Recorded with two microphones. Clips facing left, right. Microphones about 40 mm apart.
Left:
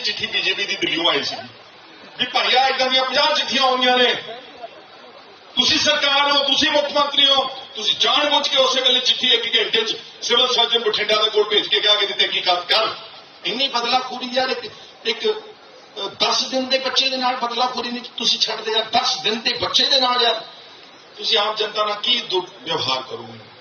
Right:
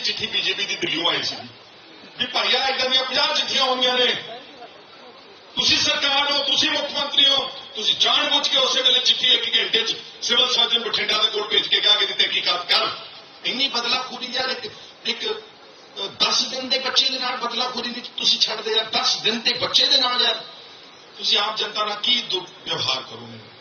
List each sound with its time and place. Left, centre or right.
0.0 s a man's voice: centre
5.5 s a man's voice: centre
20.1 s a man's voice: left
21.2 s a man's voice: centre